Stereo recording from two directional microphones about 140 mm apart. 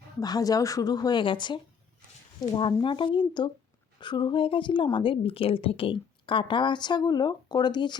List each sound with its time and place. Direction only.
0.2 s a woman's voice: 25° left (ahead or behind)